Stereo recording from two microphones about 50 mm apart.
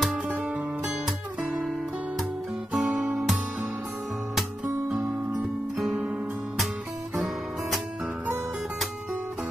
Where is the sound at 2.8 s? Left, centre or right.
Centre.